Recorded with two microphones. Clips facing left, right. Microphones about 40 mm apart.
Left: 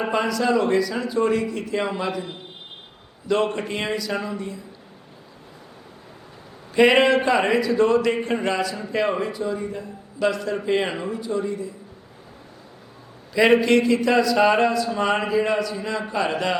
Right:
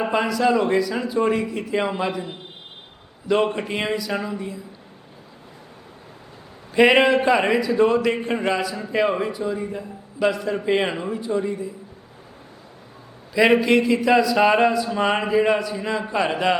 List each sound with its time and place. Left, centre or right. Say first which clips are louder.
0.0 s speech: right 2 dB; centre
6.7 s speech: right 1 dB; centre
13.3 s speech: even; centre